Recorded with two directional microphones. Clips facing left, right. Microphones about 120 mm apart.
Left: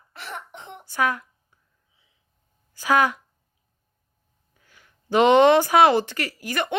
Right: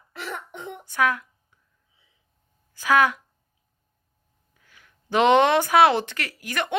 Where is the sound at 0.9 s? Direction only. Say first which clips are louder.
Right 1 dB; 15° left (ahead or behind).